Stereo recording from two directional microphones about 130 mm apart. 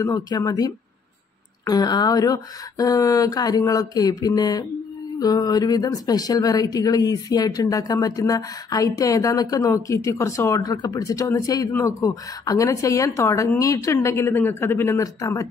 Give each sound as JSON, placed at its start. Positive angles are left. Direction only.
{"t": 0.0, "sound": "speech", "side_deg": 25}